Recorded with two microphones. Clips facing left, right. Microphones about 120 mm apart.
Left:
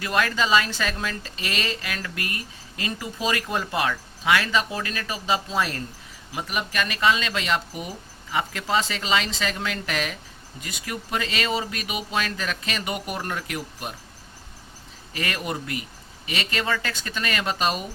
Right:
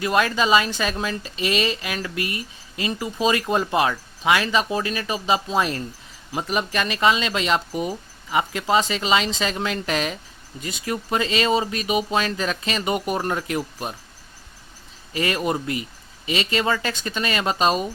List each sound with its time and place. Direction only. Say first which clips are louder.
0.0 s a woman's voice: right 4 dB; 20° right (ahead or behind)
6.3 s a woman's voice: right 4 dB; 30° right (ahead or behind)
15.1 s a woman's voice: right 6 dB; 25° right (ahead or behind)